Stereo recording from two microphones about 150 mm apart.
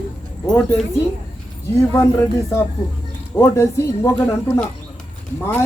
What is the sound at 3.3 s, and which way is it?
Speech, 20° left (ahead or behind).